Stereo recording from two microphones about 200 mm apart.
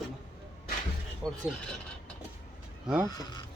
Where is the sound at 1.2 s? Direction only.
Centre (ahead or behind).